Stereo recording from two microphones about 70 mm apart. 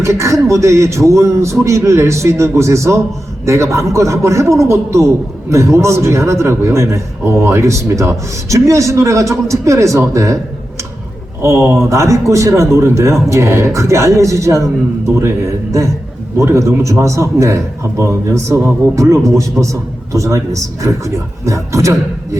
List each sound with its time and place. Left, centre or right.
0.0 s a man's voice: right
11.4 s a man's voice: right